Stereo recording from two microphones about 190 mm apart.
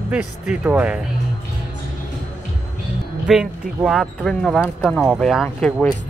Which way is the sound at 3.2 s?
5° right (ahead or behind).